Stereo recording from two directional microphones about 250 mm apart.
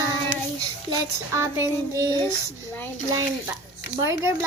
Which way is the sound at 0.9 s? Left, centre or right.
Centre.